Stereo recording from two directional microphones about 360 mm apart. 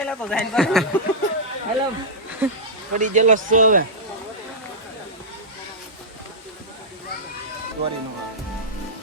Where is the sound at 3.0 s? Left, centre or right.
Centre.